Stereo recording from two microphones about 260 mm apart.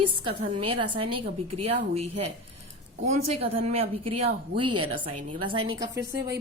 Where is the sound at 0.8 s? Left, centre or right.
Right.